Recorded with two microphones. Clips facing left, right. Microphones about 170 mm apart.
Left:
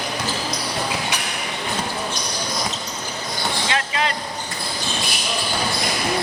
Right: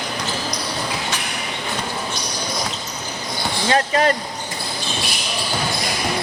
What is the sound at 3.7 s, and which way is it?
Speech, 45° right (ahead or behind).